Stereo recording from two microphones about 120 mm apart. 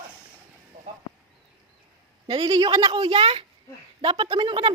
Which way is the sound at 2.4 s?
35° right (ahead or behind).